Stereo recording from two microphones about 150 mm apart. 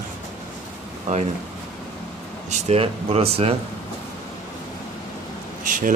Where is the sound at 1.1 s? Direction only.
50° right (ahead or behind).